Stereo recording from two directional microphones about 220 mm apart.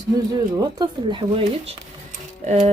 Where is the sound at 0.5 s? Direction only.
20° right (ahead or behind).